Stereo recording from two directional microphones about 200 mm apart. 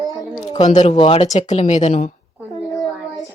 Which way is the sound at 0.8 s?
30° left (ahead or behind).